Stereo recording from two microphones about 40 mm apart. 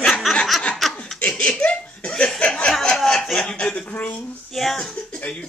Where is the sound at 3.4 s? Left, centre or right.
Left.